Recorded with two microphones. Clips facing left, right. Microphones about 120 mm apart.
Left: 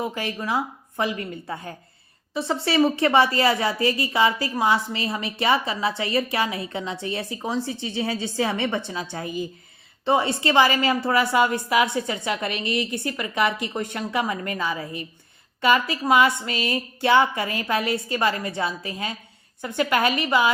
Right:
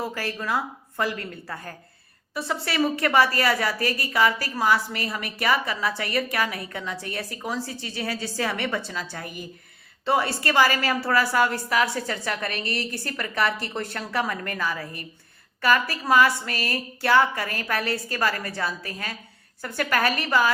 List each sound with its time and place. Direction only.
0.0 s a woman's voice: 20° left (ahead or behind)